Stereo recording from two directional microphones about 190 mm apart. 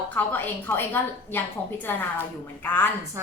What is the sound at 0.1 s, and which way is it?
Speech, 10° left (ahead or behind).